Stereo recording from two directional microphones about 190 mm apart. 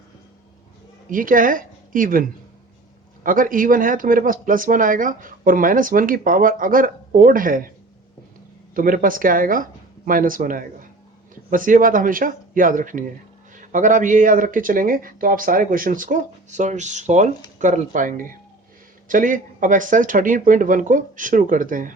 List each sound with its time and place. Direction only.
1.1 s speech: 45° right (ahead or behind)
3.2 s speech: 45° right (ahead or behind)
8.7 s speech: 45° right (ahead or behind)